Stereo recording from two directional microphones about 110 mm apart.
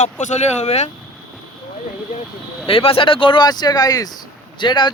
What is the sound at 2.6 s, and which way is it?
Speech, 60° left (ahead or behind).